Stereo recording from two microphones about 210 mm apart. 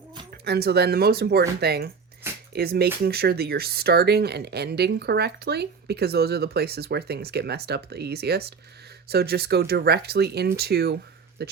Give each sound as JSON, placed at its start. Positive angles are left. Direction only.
{"t": 0.4, "sound": "speech", "side_deg": -50}